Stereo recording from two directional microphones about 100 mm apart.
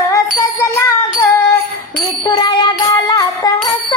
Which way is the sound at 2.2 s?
45° left (ahead or behind).